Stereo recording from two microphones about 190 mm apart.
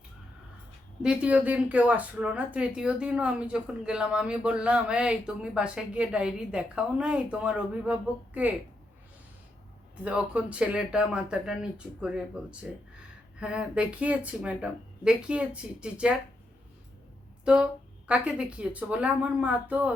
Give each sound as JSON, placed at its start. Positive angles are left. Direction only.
{"t": 1.0, "sound": "speech", "side_deg": -5}
{"t": 10.0, "sound": "speech", "side_deg": -5}
{"t": 17.4, "sound": "speech", "side_deg": -5}